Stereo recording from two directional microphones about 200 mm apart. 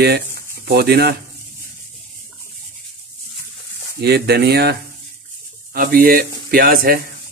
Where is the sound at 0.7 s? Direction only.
55° right (ahead or behind).